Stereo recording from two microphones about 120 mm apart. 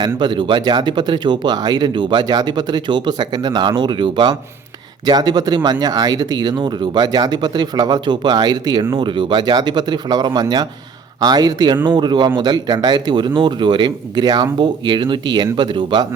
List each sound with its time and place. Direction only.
0.0 s speech: 40° right (ahead or behind)